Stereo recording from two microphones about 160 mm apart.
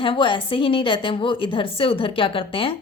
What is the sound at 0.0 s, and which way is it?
A woman's voice, 30° left (ahead or behind).